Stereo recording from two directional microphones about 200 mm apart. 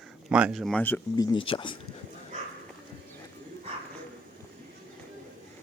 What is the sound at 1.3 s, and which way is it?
Speech, 25° left (ahead or behind).